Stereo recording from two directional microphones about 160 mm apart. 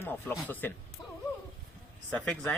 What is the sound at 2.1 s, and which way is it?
Speech, 5° left (ahead or behind).